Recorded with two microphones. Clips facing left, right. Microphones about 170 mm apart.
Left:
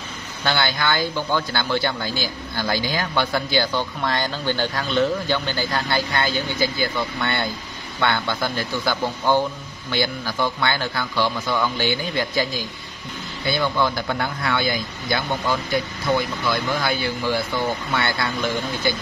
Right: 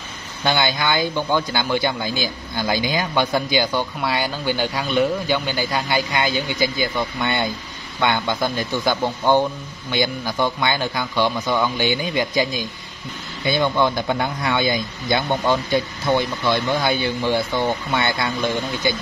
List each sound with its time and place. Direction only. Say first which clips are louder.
0.4 s speech: right 2 dB; 15° right (ahead or behind)